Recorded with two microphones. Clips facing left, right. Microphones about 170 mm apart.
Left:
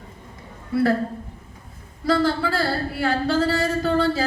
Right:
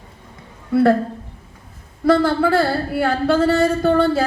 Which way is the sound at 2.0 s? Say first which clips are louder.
Right 5 dB; 55° right (ahead or behind).